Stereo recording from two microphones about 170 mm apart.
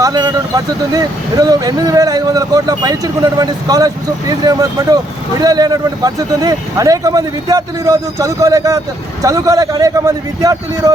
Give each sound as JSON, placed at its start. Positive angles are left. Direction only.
{"t": 0.0, "sound": "speech", "side_deg": -20}